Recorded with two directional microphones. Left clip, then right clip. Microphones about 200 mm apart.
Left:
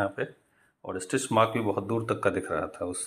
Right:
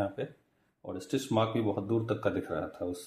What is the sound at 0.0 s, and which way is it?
Speech, 10° left (ahead or behind).